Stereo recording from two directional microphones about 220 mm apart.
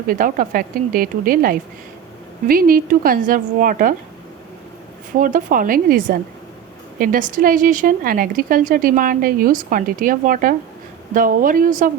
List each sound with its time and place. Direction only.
0.1 s speech: 40° right (ahead or behind)
5.1 s speech: 40° right (ahead or behind)